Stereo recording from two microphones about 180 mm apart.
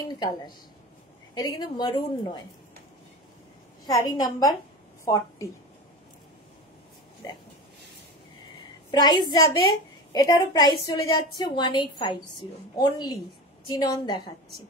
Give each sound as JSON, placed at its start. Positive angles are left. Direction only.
{"t": 1.3, "sound": "a woman's voice", "side_deg": 25}
{"t": 3.8, "sound": "a woman's voice", "side_deg": 20}
{"t": 7.2, "sound": "a woman's voice", "side_deg": 20}
{"t": 8.9, "sound": "a woman's voice", "side_deg": 25}